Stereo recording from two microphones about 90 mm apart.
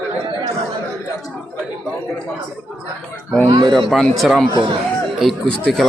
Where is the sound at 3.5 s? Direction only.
60° right (ahead or behind).